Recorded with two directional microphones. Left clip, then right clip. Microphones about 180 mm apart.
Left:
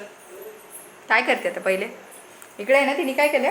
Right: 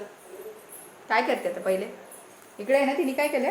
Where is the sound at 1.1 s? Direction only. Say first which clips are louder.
Left 4 dB; 10° left (ahead or behind).